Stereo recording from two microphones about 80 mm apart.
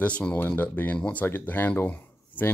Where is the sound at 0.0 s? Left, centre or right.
Centre.